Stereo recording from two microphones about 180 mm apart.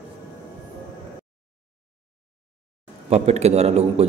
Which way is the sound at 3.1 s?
35° right (ahead or behind).